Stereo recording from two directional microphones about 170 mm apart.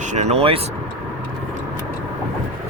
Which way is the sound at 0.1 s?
40° right (ahead or behind).